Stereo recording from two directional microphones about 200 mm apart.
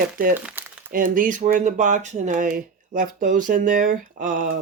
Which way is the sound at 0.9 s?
45° right (ahead or behind).